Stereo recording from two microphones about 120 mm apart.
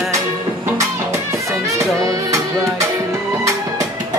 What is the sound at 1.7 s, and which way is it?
Music, 25° right (ahead or behind).